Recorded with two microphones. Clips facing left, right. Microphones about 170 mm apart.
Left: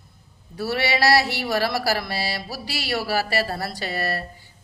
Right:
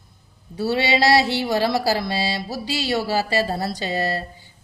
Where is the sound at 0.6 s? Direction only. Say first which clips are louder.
Right 3 dB; 20° right (ahead or behind).